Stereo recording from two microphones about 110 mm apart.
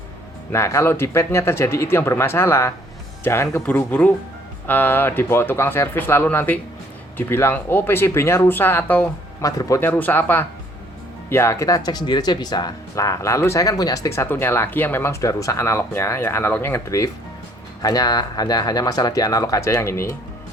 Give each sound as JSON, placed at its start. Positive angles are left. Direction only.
{"t": 0.5, "sound": "speech", "side_deg": 25}
{"t": 9.4, "sound": "speech", "side_deg": 30}
{"t": 9.8, "sound": "speech", "side_deg": 15}
{"t": 17.8, "sound": "speech", "side_deg": 35}